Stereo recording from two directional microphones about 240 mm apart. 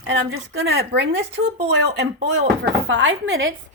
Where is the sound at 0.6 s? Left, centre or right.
Right.